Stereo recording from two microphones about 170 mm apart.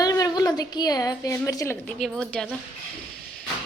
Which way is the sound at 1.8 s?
5° left (ahead or behind).